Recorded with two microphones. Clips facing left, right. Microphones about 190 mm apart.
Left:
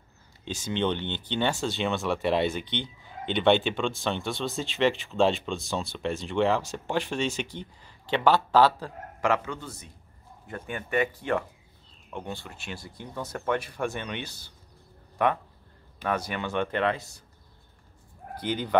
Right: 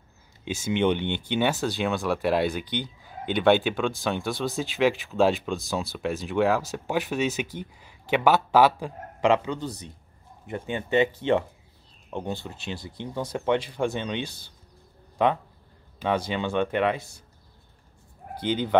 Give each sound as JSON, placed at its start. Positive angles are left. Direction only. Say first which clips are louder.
{"t": 0.5, "sound": "speech", "louder": "right 4 dB", "side_deg": -10}
{"t": 9.6, "sound": "speech", "louder": "right 8 dB", "side_deg": -35}
{"t": 10.4, "sound": "speech", "louder": "right 5 dB", "side_deg": -20}
{"t": 12.1, "sound": "speech", "louder": "right 5 dB", "side_deg": -30}
{"t": 13.2, "sound": "speech", "louder": "right 4 dB", "side_deg": -15}
{"t": 16.1, "sound": "speech", "louder": "right 4 dB", "side_deg": -25}
{"t": 18.4, "sound": "speech", "louder": "right 4 dB", "side_deg": -70}